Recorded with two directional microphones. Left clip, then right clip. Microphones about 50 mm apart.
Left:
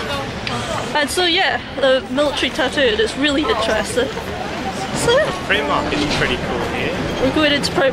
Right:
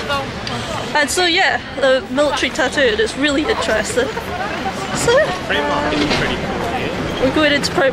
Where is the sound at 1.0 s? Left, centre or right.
Centre.